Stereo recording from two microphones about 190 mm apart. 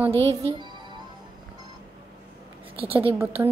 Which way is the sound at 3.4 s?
10° right (ahead or behind).